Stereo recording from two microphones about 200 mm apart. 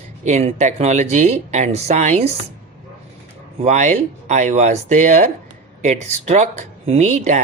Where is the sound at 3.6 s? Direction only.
35° right (ahead or behind).